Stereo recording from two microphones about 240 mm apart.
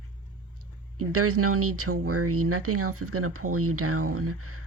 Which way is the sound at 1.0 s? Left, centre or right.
Right.